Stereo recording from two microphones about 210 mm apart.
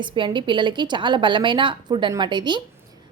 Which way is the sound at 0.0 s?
25° right (ahead or behind).